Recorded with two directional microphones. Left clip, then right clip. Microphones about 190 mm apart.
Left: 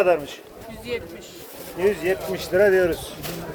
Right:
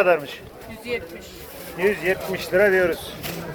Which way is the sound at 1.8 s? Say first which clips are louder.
Even; 15° left (ahead or behind).